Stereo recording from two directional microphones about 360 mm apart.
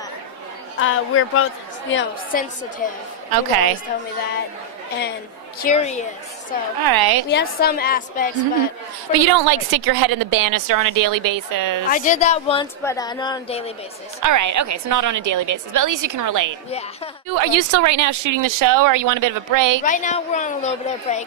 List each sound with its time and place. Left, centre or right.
0.7 s a woman's voice: left
3.3 s a woman's voice: right
5.6 s a woman's voice: centre
6.8 s a woman's voice: right
7.2 s a woman's voice: left
9.1 s a woman's voice: right
11.9 s speech: left
14.2 s a woman's voice: right
19.8 s a woman's voice: left